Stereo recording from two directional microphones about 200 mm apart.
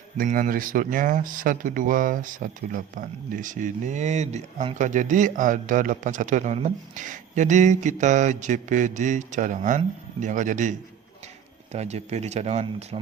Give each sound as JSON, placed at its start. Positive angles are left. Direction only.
{"t": 0.2, "sound": "speech", "side_deg": -40}